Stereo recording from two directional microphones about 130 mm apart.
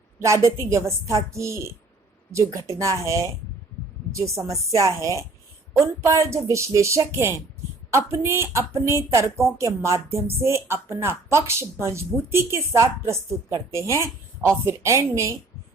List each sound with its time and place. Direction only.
0.2 s speech: 25° right (ahead or behind)